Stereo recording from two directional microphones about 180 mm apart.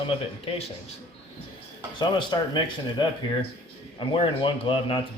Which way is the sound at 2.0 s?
25° left (ahead or behind).